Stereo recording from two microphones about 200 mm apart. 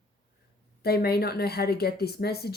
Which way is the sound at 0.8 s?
50° left (ahead or behind).